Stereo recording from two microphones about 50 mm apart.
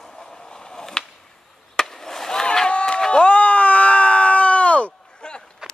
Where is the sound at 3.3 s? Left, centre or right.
Left.